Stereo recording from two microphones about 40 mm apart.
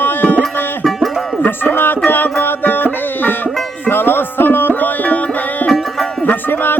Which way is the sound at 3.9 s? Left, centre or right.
Left.